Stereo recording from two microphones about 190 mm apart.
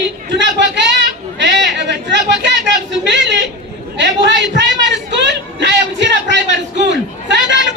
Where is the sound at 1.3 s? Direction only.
70° right (ahead or behind).